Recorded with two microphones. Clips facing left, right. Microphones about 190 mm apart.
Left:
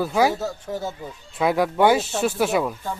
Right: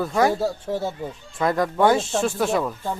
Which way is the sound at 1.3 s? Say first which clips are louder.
Left 1 dB; 5° left (ahead or behind).